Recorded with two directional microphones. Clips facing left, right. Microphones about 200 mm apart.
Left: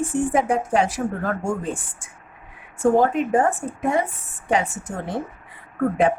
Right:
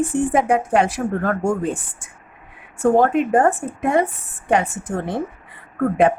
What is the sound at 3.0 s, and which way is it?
A woman's voice, 60° right (ahead or behind).